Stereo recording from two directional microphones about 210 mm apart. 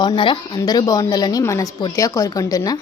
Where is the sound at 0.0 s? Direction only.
20° left (ahead or behind).